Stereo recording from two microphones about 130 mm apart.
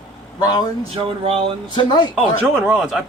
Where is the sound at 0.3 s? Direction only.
35° left (ahead or behind).